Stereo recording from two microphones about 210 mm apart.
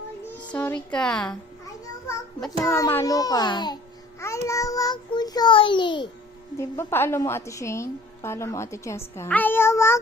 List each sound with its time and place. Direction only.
0.5 s speech: 5° left (ahead or behind)
2.5 s a woman's voice: 15° left (ahead or behind)
6.6 s a woman's voice: 10° left (ahead or behind)